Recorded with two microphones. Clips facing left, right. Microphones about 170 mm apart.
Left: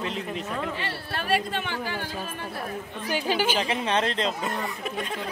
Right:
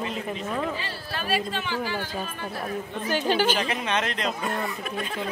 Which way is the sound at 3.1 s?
10° left (ahead or behind).